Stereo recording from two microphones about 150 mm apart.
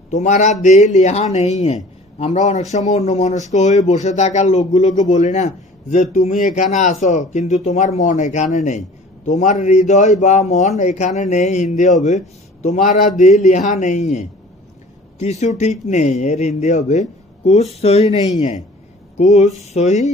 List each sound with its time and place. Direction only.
0.1 s speech: 50° left (ahead or behind)
15.2 s speech: 50° left (ahead or behind)